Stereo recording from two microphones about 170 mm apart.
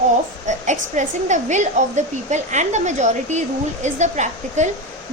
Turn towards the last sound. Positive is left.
turn(degrees=-45)  # may be behind; listen again after turning